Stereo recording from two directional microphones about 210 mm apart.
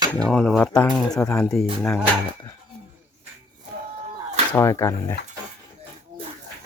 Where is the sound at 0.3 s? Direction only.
Centre (ahead or behind).